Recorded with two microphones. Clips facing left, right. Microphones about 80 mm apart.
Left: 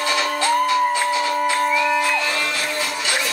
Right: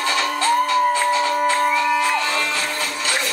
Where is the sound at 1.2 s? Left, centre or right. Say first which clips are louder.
Right 1 dB; right.